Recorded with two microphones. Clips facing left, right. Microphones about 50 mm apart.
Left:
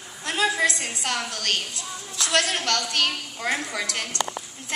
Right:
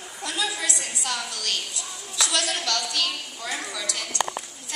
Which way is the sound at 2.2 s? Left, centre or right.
Left.